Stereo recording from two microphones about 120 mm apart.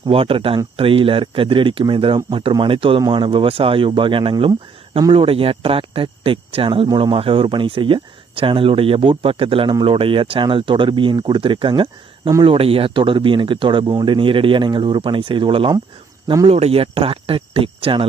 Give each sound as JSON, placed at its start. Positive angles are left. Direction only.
{"t": 0.0, "sound": "speech", "side_deg": -50}
{"t": 16.2, "sound": "speech", "side_deg": -35}
{"t": 16.5, "sound": "speech", "side_deg": -55}